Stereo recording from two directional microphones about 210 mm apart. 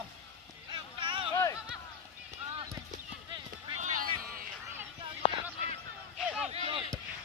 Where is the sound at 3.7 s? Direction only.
35° right (ahead or behind).